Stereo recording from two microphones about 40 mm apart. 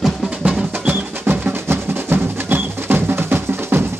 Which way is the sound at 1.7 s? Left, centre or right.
Right.